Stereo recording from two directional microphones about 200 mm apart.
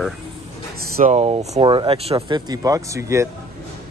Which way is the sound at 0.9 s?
35° right (ahead or behind).